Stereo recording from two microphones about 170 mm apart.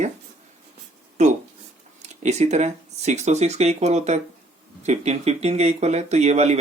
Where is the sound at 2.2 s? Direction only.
40° right (ahead or behind).